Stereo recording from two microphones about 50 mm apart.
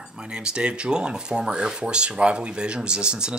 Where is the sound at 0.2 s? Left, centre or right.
Centre.